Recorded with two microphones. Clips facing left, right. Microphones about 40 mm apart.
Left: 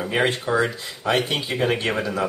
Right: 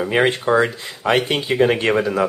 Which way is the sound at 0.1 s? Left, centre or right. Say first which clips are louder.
Right 5 dB; right.